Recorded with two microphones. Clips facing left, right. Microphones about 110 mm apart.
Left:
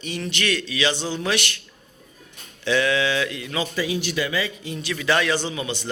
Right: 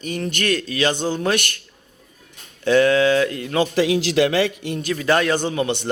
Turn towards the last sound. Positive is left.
turn(degrees=-60)  # may be behind; listen again after turning